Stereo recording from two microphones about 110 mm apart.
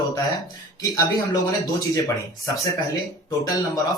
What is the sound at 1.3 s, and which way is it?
Speech, 35° left (ahead or behind).